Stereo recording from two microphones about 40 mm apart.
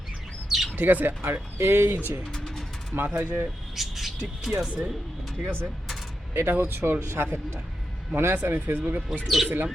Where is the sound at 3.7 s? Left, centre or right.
Centre.